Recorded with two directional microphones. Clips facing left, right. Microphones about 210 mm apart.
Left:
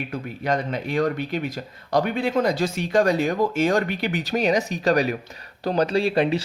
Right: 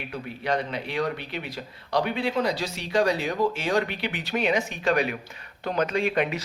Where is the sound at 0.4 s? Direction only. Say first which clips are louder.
Left 3 dB; 45° left (ahead or behind).